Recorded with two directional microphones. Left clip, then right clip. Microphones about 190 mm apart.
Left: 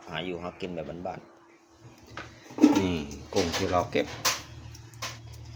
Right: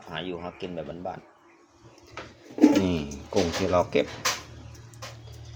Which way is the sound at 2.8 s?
10° right (ahead or behind).